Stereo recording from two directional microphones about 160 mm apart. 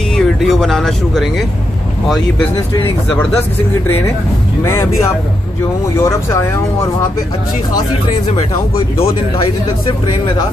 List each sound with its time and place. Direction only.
0.1 s speech: centre (ahead or behind)
3.8 s speech: 15° left (ahead or behind)
5.9 s speech: 15° left (ahead or behind)
8.4 s speech: 35° left (ahead or behind)